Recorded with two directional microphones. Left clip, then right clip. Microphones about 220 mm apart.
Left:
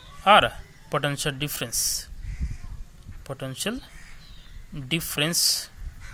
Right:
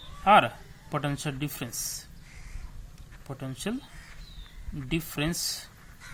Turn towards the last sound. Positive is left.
turn(degrees=20)  # may be behind; listen again after turning